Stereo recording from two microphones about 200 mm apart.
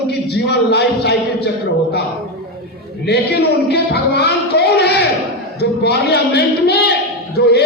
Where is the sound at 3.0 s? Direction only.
55° left (ahead or behind).